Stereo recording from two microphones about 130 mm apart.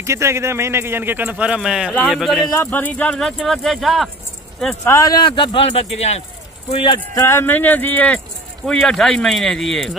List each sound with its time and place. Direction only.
0.0 s speech: 20° right (ahead or behind); by 2.5 s centre (ahead or behind)
2.5 s speech: 15° left (ahead or behind); by 4.1 s centre (ahead or behind)
4.8 s speech: 25° left (ahead or behind); by 6.2 s 55° left (ahead or behind)
6.7 s speech: 40° left (ahead or behind)
7.2 s speech: 20° left (ahead or behind); by 9.9 s 5° left (ahead or behind)